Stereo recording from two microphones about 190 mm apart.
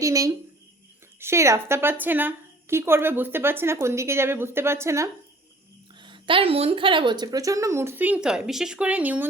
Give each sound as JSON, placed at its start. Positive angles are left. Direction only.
{"t": 0.0, "sound": "a woman's voice", "side_deg": -15}
{"t": 6.0, "sound": "a woman's voice", "side_deg": -25}